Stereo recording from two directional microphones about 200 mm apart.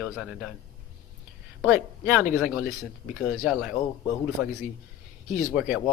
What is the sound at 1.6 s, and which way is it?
Speech, 5° right (ahead or behind).